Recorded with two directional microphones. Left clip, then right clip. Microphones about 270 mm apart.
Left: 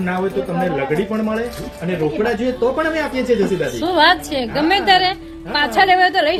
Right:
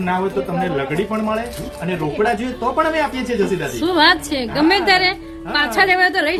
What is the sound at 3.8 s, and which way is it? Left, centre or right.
A woman's voice, centre.